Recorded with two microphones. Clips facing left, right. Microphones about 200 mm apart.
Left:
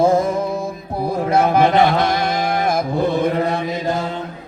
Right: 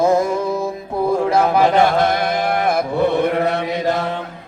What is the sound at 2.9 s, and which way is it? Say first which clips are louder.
Chant: right 2 dB; 65° right (ahead or behind).